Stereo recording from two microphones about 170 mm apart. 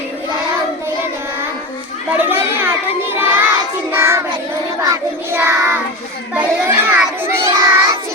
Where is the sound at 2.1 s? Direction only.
10° right (ahead or behind).